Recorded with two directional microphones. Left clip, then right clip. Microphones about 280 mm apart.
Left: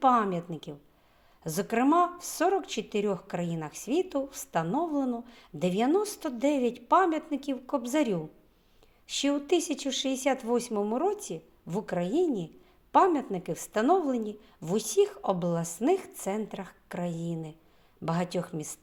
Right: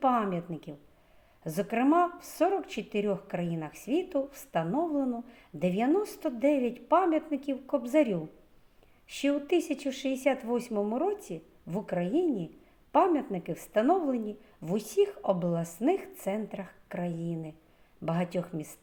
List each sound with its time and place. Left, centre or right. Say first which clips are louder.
0.0 s a woman's voice: left 3 dB; left